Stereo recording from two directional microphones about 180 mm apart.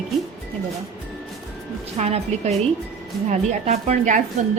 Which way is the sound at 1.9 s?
35° right (ahead or behind).